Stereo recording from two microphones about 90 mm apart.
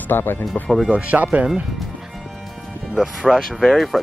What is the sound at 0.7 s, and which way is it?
Speech, centre (ahead or behind).